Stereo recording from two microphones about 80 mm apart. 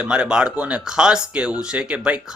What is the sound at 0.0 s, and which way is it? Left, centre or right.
Speech, centre.